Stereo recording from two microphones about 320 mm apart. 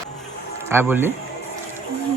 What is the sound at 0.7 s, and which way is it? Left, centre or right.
Speech, centre.